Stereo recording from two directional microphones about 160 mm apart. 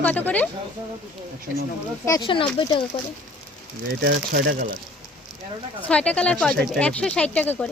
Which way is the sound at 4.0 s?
85° right.